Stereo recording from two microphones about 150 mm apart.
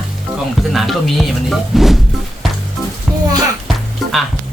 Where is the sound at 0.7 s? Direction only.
Centre (ahead or behind).